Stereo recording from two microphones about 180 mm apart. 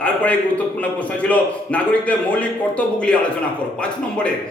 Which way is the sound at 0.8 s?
10° left (ahead or behind).